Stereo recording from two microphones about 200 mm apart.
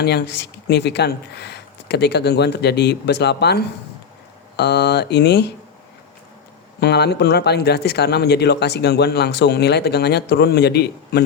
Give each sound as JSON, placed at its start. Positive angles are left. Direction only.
{"t": 0.0, "sound": "speech", "side_deg": 55}
{"t": 6.7, "sound": "speech", "side_deg": 55}